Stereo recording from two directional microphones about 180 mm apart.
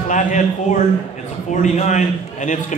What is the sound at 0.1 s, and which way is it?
A man's voice, 40° left (ahead or behind).